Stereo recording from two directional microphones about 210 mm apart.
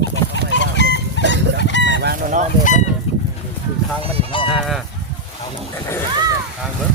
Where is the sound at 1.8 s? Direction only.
55° right (ahead or behind); by 2.4 s 40° right (ahead or behind).